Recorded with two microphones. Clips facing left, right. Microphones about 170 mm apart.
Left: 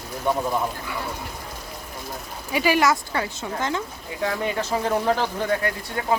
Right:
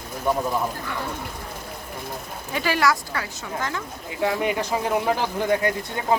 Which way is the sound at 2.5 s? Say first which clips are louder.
Left 2 dB; 10° left (ahead or behind).